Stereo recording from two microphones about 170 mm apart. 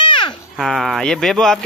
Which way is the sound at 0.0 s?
30° left (ahead or behind).